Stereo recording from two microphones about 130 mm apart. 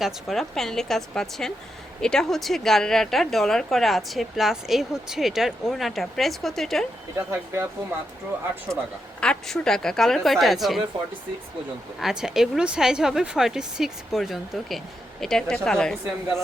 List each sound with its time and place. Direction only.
0.0 s a woman's voice: centre (ahead or behind)
7.2 s speech: 20° right (ahead or behind)
9.2 s a woman's voice: 5° left (ahead or behind)
11.9 s a woman's voice: 5° right (ahead or behind)